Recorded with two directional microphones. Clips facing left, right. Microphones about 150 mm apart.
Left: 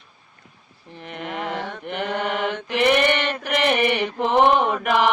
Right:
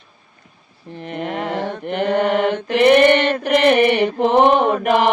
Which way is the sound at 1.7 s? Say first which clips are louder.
Right 6 dB; centre (ahead or behind).